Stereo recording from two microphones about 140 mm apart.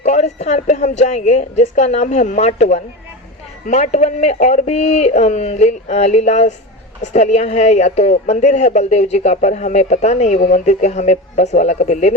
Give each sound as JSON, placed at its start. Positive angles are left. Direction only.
{"t": 0.0, "sound": "a woman's voice", "side_deg": 55}